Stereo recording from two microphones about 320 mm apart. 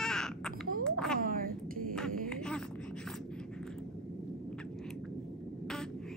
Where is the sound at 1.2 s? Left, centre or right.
Right.